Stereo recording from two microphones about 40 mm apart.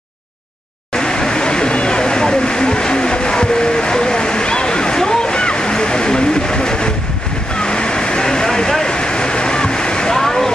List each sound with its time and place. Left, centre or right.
0.9 s vehicle: centre